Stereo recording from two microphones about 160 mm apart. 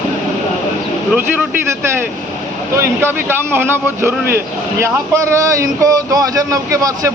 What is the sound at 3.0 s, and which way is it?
Speech, 15° right (ahead or behind).